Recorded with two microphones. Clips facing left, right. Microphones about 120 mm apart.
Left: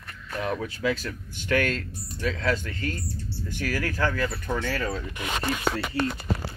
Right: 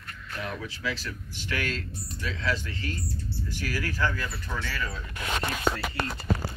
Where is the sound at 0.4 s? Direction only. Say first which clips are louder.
Left 7 dB; 50° left (ahead or behind).